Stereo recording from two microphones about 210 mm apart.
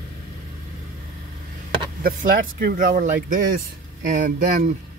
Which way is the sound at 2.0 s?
45° right (ahead or behind).